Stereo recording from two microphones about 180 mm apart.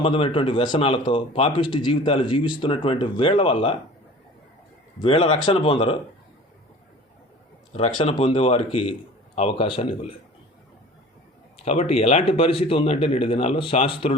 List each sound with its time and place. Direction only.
0.0 s speech: 30° left (ahead or behind)
4.9 s speech: 30° left (ahead or behind)
7.7 s a man's voice: 30° left (ahead or behind)
11.6 s a man's voice: 35° left (ahead or behind)